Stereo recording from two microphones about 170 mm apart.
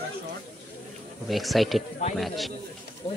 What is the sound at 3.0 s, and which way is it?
Speech, 35° left (ahead or behind).